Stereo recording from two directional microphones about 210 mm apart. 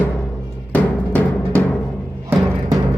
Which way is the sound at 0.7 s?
5° left (ahead or behind).